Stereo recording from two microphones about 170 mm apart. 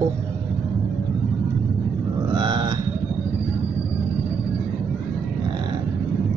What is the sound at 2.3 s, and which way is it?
Burping, 25° right (ahead or behind).